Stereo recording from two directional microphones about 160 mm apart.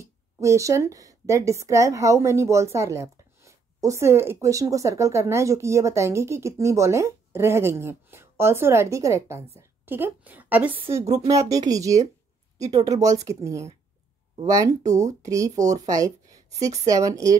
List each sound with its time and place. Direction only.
0.0 s a woman's voice: 20° right (ahead or behind)